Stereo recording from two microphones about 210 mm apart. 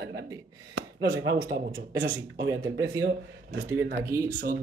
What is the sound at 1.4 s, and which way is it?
Speech, 45° right (ahead or behind).